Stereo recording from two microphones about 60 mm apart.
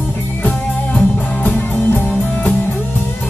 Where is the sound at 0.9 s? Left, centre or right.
Left.